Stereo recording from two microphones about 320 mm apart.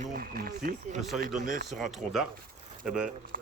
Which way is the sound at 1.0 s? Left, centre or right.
Centre.